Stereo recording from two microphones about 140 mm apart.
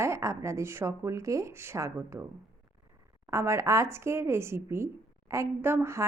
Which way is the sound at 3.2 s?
20° right (ahead or behind).